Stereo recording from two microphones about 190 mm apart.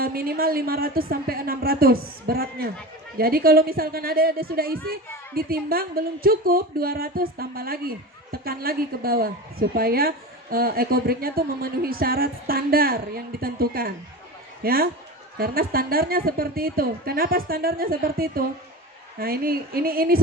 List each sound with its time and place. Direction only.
0.0 s a woman's voice: 50° right (ahead or behind)